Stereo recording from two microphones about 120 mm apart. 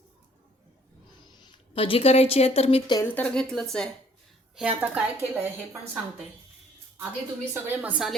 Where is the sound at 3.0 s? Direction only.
10° left (ahead or behind).